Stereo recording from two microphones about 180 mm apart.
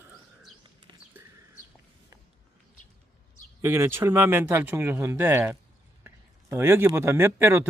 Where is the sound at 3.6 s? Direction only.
15° right (ahead or behind).